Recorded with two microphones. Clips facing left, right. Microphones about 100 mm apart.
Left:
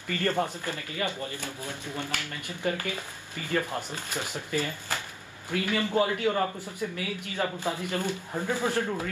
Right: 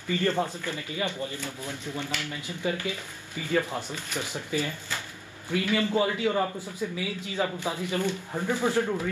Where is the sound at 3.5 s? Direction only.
15° right (ahead or behind).